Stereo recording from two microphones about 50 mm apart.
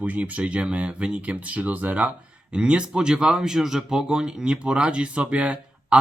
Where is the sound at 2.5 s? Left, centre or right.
Centre.